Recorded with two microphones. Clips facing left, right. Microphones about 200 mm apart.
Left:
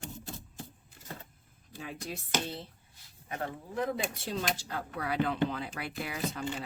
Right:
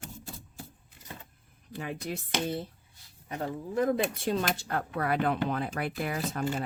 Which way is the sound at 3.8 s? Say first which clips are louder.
Right 6 dB; 50° right (ahead or behind).